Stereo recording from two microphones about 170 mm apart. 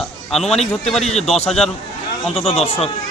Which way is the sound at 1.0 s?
35° left (ahead or behind).